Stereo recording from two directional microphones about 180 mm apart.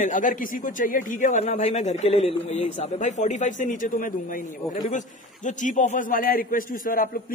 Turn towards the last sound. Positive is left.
turn(degrees=50)  # may be behind; listen again after turning